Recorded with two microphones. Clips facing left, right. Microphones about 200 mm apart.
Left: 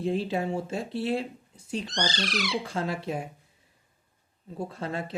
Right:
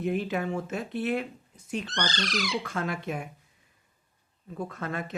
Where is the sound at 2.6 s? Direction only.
30° left (ahead or behind).